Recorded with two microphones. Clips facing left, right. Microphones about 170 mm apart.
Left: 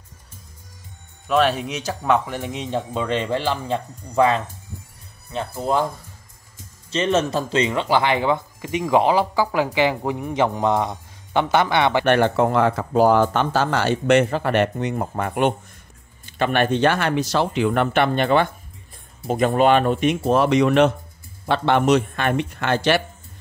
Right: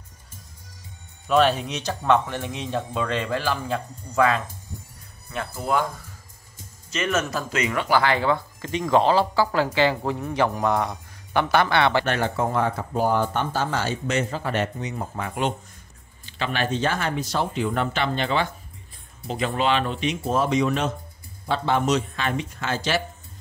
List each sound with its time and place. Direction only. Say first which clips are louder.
1.2 s speech: even; centre (ahead or behind); by 4.4 s 25° left (ahead or behind)
5.6 s speech: left 3 dB; 30° left (ahead or behind)
6.9 s speech: left 5 dB; 30° left (ahead or behind)
12.1 s speech: left 7 dB; 70° left (ahead or behind)